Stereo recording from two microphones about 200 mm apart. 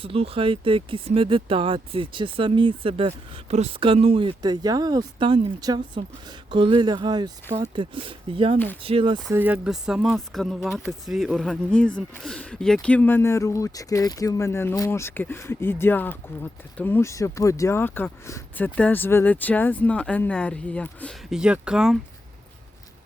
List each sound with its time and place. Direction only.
0.0 s speech: 30° right (ahead or behind)
8.5 s speech: 10° left (ahead or behind)
8.8 s speech: 30° right (ahead or behind)
9.3 s speech: 10° right (ahead or behind)